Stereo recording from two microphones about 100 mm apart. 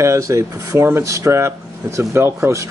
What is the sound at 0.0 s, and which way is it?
Speech, 30° right (ahead or behind).